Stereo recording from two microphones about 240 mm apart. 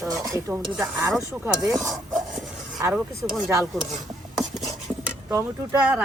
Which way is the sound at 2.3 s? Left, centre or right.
Centre.